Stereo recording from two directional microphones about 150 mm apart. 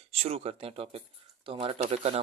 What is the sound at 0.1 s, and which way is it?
Speech, 45° right (ahead or behind).